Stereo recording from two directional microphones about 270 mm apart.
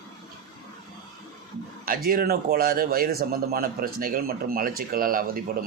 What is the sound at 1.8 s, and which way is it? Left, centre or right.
Speech, right.